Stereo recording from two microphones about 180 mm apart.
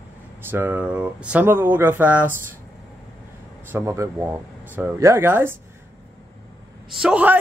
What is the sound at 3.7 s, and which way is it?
Speech, 15° right (ahead or behind).